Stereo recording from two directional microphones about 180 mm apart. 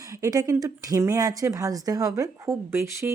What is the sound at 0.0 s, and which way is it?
Speech, 20° right (ahead or behind).